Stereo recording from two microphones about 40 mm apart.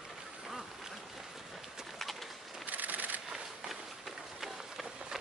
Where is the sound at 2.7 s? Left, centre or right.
Right.